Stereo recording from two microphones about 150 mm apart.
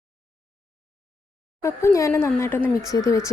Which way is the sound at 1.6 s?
20° left (ahead or behind).